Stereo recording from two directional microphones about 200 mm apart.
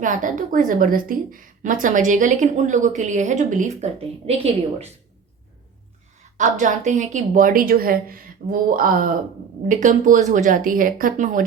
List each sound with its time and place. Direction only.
0.0 s a woman's voice: 40° right (ahead or behind)
6.3 s a woman's voice: 40° right (ahead or behind)